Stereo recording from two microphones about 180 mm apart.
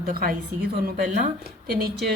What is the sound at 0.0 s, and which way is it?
A woman's voice, 55° right (ahead or behind).